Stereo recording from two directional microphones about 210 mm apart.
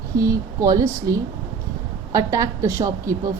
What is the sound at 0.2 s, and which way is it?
A woman's voice, 15° right (ahead or behind).